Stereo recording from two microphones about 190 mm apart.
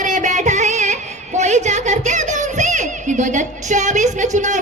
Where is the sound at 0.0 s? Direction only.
40° right (ahead or behind).